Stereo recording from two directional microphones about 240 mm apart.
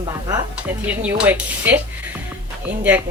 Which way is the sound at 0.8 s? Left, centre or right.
Centre.